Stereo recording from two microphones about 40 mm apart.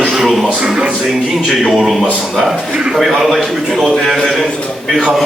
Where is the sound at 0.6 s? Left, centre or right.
Right.